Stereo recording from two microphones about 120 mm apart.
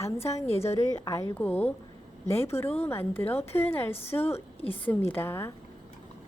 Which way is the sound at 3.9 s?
55° left (ahead or behind).